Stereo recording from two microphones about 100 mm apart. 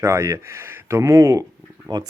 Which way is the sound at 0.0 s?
30° right (ahead or behind).